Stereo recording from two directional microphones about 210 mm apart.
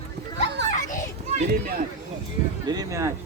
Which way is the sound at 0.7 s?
35° left (ahead or behind).